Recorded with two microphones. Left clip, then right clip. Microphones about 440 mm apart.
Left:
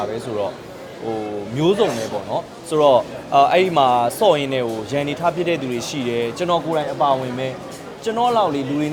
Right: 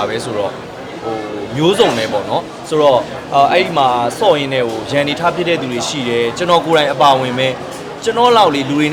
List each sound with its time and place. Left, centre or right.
1.5 s speech: centre
6.7 s speech: centre